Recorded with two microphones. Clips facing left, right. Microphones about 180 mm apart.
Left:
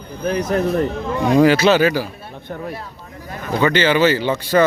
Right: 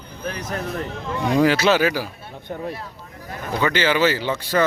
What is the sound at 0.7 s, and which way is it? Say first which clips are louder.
Speech: left 7 dB; 45° left (ahead or behind).